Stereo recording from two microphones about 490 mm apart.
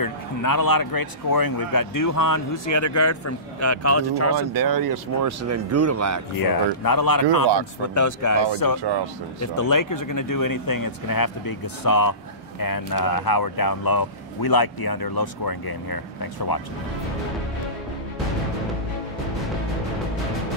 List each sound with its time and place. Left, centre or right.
0.0 s speech: left
4.6 s speech: right
6.3 s speech: left